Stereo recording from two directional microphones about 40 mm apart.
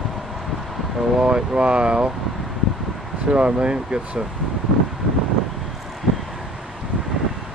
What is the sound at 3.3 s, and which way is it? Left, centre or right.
Speech, right.